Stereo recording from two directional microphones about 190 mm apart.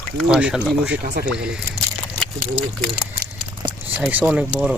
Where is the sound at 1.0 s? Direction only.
55° right (ahead or behind).